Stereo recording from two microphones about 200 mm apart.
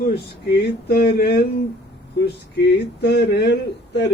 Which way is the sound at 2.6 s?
55° left (ahead or behind).